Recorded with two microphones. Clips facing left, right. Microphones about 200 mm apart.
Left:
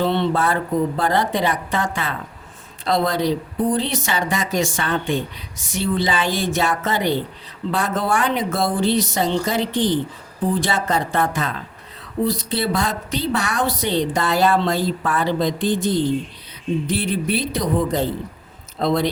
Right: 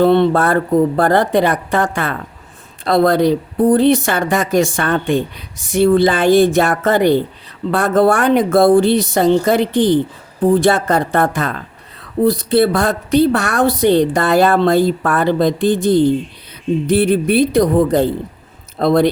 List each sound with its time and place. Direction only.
0.0 s speech: 55° right (ahead or behind)